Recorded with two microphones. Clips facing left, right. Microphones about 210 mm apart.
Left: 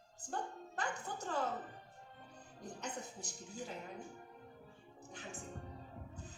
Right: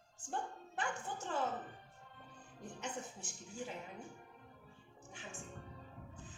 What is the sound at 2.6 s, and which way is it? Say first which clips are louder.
A woman's voice: even; 40° left (ahead or behind).